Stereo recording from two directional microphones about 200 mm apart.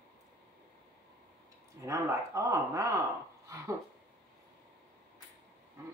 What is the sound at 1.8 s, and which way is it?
Speech, 15° right (ahead or behind).